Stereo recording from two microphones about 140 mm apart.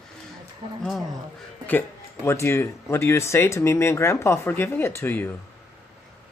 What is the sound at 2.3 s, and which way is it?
Speech, 20° left (ahead or behind).